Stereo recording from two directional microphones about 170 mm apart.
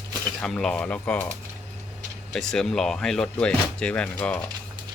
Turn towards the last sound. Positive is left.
turn(degrees=5)  # may be behind; listen again after turning